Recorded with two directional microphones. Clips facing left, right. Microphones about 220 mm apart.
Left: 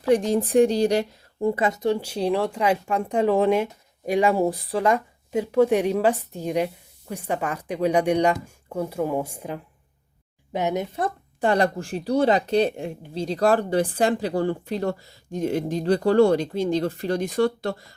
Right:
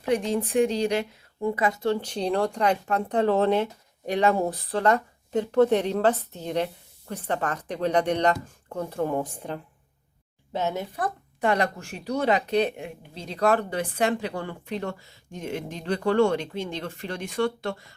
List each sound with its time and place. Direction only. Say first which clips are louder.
0.1 s speech: left 5 dB; 35° left (ahead or behind)